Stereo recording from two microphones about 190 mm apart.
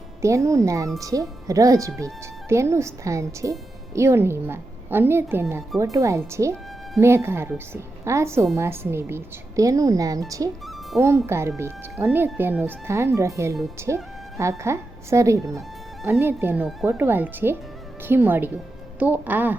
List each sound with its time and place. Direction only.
0.2 s speech: 15° right (ahead or behind)